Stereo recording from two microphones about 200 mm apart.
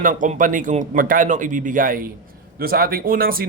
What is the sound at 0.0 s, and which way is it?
A man's voice, 40° right (ahead or behind).